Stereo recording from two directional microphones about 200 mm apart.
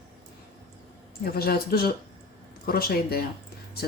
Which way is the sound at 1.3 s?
50° left (ahead or behind).